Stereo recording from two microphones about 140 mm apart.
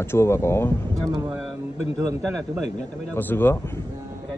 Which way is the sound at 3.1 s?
15° left (ahead or behind).